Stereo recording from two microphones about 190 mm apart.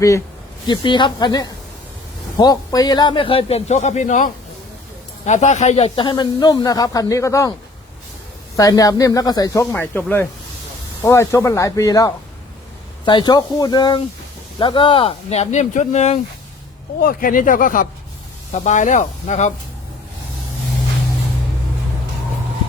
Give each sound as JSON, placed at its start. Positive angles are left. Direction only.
{"t": 0.7, "sound": "speech", "side_deg": 25}
{"t": 8.5, "sound": "speech", "side_deg": 20}
{"t": 17.0, "sound": "speech", "side_deg": 50}